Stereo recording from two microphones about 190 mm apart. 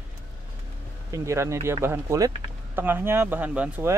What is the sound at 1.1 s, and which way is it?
Speech, 15° right (ahead or behind).